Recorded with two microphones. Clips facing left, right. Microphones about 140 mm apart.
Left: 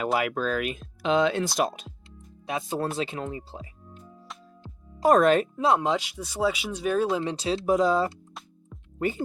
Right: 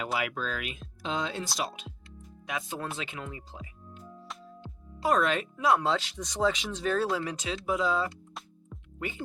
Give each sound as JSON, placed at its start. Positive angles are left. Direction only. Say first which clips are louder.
{"t": 0.0, "sound": "speech", "louder": "left 6 dB", "side_deg": 50}
{"t": 1.0, "sound": "speech", "louder": "left 10 dB", "side_deg": 70}
{"t": 1.6, "sound": "speech", "louder": "left 7 dB", "side_deg": 45}
{"t": 4.6, "sound": "music", "louder": "left 8 dB", "side_deg": 40}
{"t": 5.5, "sound": "speech", "louder": "left 3 dB", "side_deg": 25}
{"t": 8.3, "sound": "music", "louder": "even", "side_deg": 0}
{"t": 9.0, "sound": "speech", "louder": "left 9 dB", "side_deg": 40}